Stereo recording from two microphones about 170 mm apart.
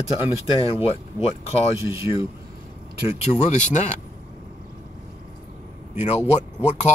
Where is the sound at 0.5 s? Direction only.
35° left (ahead or behind).